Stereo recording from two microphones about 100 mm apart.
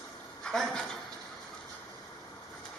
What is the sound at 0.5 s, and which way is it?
Speech, 5° left (ahead or behind).